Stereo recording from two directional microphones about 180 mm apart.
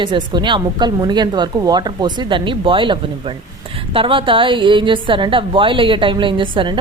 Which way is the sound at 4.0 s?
30° right (ahead or behind).